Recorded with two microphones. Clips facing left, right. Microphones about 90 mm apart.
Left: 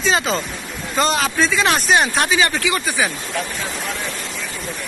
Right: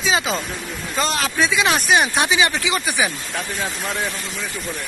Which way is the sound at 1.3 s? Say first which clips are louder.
Left 1 dB; 15° right (ahead or behind).